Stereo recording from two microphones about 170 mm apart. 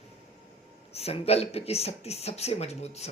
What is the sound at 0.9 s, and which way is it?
Speech, 35° left (ahead or behind).